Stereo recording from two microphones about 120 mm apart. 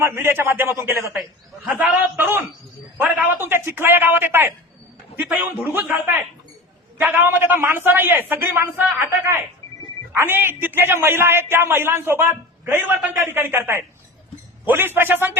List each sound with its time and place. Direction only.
0.0 s a man's voice: 20° right (ahead or behind)